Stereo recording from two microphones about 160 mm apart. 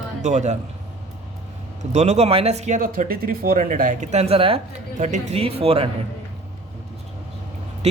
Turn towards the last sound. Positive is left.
turn(degrees=-40)  # may be behind; listen again after turning